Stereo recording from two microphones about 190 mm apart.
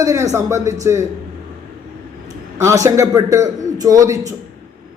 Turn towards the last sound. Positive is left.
turn(degrees=-15)  # may be behind; listen again after turning